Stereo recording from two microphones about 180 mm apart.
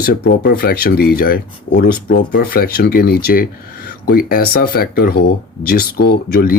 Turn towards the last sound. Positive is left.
turn(degrees=55)  # may be behind; listen again after turning